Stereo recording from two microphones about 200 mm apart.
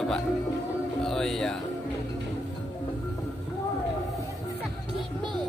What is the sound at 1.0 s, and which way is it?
Music, centre (ahead or behind).